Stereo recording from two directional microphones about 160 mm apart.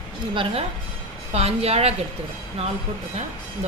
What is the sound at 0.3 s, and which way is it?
A woman's voice, 35° right (ahead or behind).